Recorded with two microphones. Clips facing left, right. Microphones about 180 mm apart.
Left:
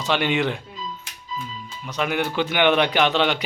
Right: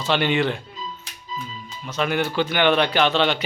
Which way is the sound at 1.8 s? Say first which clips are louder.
Right 1 dB; 10° left (ahead or behind).